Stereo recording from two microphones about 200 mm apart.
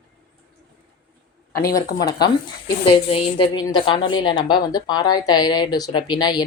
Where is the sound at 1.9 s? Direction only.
20° left (ahead or behind).